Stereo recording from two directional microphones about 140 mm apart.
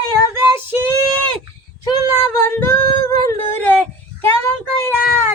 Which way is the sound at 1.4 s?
30° left (ahead or behind).